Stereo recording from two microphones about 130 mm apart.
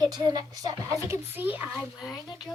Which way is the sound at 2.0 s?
30° left (ahead or behind).